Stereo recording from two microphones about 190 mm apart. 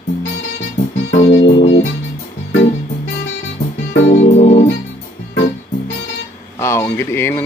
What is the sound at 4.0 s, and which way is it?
Music, 35° left (ahead or behind).